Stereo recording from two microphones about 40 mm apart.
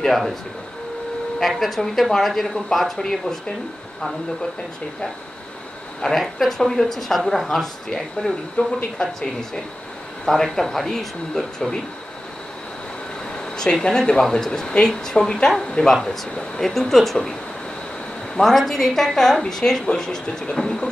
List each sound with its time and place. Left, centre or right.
0.0 s speech: centre
1.4 s speech: centre
3.0 s speech: centre
6.0 s speech: centre
8.6 s speech: left
8.9 s speech: centre
10.2 s speech: centre
13.8 s speech: centre
15.9 s speech: centre
18.3 s speech: centre